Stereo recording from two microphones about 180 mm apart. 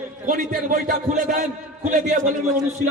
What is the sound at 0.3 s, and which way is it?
A man's voice, 50° right (ahead or behind).